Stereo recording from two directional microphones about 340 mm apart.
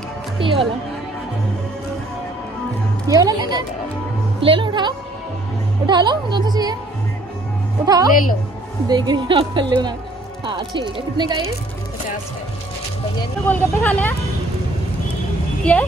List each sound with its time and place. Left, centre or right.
0.4 s speech: centre
3.1 s music: centre
5.9 s a woman's voice: centre
7.8 s speech: centre
8.1 s a woman's voice: left
8.8 s speech: centre
13.2 s speech: centre